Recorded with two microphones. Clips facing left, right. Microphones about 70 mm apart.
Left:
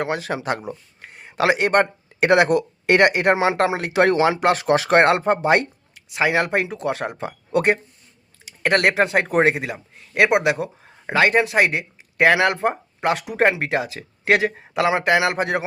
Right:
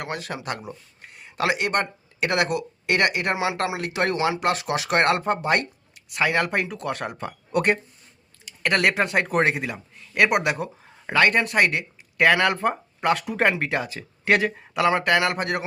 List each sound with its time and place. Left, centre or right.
0.0 s speech: left
1.1 s a sound: left
1.4 s speech: left
2.5 s speech: left; by 7.8 s centre
9.4 s speech: centre
13.5 s speech: centre; by 15.6 s left